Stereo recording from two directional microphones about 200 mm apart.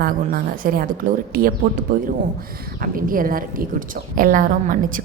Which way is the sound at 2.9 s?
45° right (ahead or behind).